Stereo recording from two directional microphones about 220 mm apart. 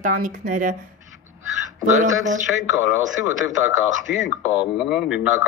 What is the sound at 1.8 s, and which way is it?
Speech, 35° right (ahead or behind).